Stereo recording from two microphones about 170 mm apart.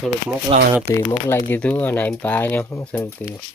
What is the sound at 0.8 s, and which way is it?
Speech, 20° left (ahead or behind).